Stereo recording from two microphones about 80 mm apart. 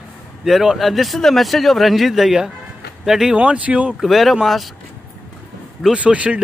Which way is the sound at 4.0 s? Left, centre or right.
Centre.